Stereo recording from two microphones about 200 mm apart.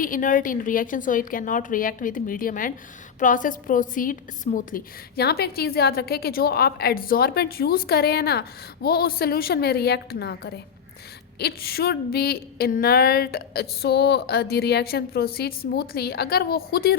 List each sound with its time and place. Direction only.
0.0 s a woman's voice: 40° left (ahead or behind)